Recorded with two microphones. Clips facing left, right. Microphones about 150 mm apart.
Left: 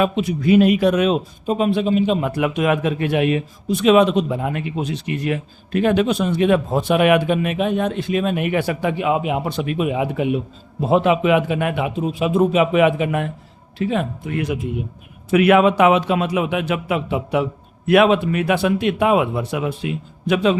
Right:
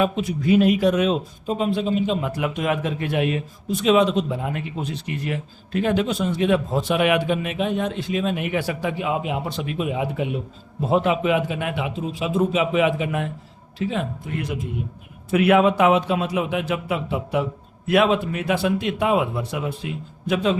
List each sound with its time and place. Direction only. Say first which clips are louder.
0.0 s a man's voice: left 3 dB; 75° left (ahead or behind)
15.3 s a man's voice: left 3 dB; 75° left (ahead or behind)